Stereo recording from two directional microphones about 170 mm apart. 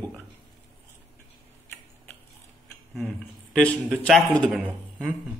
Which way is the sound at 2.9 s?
5° left (ahead or behind).